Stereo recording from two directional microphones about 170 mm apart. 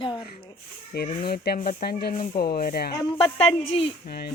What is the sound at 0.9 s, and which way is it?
Speech, 70° left (ahead or behind).